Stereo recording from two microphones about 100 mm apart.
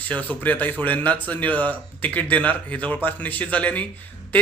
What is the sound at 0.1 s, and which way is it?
A man's voice, 15° left (ahead or behind).